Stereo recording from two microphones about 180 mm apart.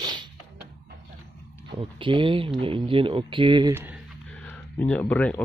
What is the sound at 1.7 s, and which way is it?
Speech, 30° right (ahead or behind).